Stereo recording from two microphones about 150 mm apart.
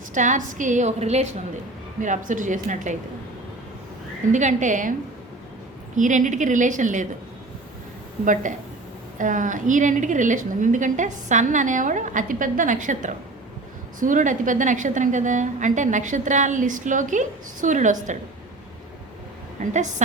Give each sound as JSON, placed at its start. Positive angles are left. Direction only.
{"t": 0.1, "sound": "a woman's voice", "side_deg": -55}
{"t": 4.3, "sound": "a woman's voice", "side_deg": -55}
{"t": 6.0, "sound": "a woman's voice", "side_deg": -55}
{"t": 8.2, "sound": "a woman's voice", "side_deg": -60}
{"t": 19.7, "sound": "a woman's voice", "side_deg": -55}